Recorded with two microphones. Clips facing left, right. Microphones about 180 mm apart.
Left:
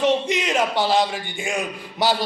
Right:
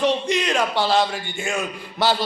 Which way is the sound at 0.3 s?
20° left (ahead or behind).